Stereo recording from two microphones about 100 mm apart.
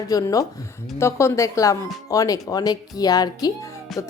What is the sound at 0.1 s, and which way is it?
Speech, 35° left (ahead or behind).